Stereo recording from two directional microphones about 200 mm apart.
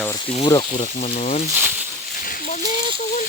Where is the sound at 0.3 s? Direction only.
25° left (ahead or behind).